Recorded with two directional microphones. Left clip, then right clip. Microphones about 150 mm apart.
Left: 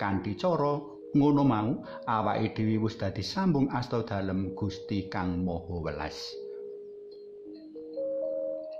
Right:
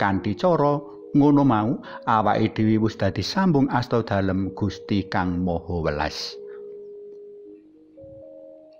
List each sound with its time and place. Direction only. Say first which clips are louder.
0.0 s speech: right 8 dB; 40° right (ahead or behind)